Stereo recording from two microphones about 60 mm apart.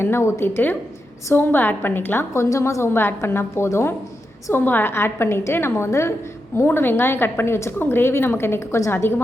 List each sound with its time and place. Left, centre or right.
0.0 s a woman's voice: left
2.3 s a woman's voice: left
2.9 s a woman's voice: left
4.5 s a woman's voice: left
6.6 s a woman's voice: left